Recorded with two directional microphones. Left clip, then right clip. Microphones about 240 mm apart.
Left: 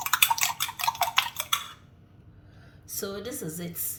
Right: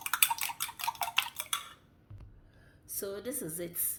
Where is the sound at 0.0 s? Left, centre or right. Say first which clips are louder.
Left 8 dB; centre.